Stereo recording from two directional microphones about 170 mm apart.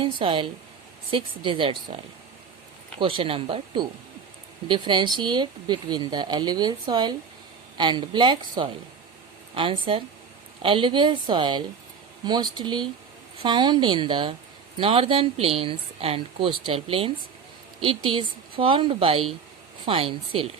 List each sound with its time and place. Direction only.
0.0 s speech: 30° right (ahead or behind)
3.0 s speech: 30° right (ahead or behind)